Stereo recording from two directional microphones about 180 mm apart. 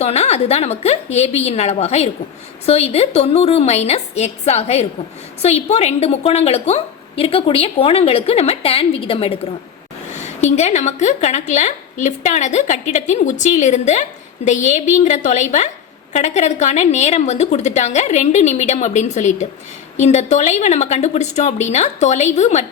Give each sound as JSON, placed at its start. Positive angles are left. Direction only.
{"t": 0.0, "sound": "a woman's voice", "side_deg": 35}